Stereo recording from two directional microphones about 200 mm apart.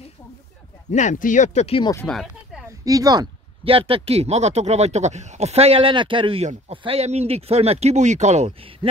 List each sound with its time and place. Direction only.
0.9 s speech: 40° left (ahead or behind)
2.0 s a sound: centre (ahead or behind)
2.8 s speech: 20° right (ahead or behind)